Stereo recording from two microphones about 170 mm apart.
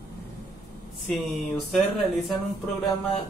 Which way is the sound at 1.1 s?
Centre (ahead or behind).